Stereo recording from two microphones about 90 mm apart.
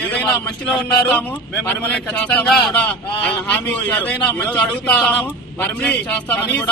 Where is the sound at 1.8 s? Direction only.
15° left (ahead or behind).